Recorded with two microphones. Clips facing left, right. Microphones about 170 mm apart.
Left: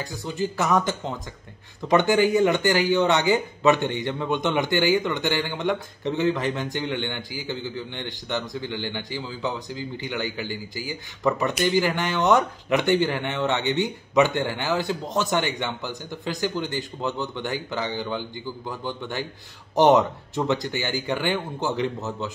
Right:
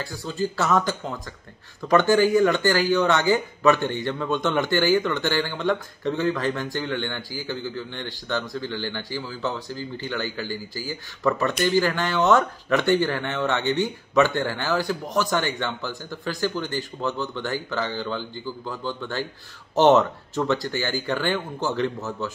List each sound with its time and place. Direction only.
0.0 s speech: 20° left (ahead or behind)